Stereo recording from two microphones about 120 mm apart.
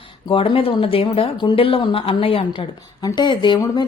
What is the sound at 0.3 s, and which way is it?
Speech, 50° left (ahead or behind).